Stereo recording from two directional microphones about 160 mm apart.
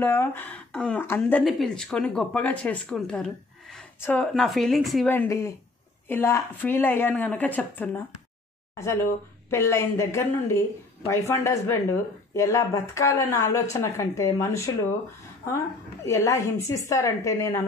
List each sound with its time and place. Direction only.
0.0 s speech: 15° left (ahead or behind)
5.1 s speech: 15° left (ahead or behind)
16.0 s speech: 20° left (ahead or behind)